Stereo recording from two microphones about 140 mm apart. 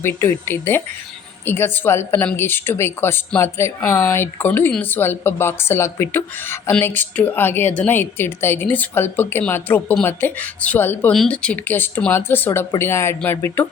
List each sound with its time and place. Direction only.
0.0 s a woman's voice: 15° left (ahead or behind)